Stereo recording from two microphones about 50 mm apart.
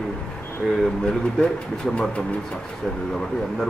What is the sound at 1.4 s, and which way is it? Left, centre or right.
Speech, centre.